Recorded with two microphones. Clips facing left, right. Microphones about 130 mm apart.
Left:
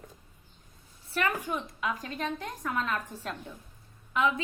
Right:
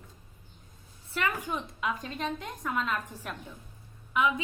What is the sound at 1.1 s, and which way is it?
A woman's voice, 20° right (ahead or behind).